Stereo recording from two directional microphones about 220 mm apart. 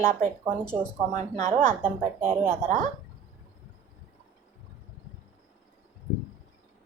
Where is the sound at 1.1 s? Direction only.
30° right (ahead or behind).